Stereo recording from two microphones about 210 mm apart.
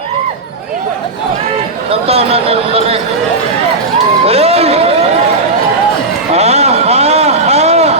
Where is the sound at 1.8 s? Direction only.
30° right (ahead or behind).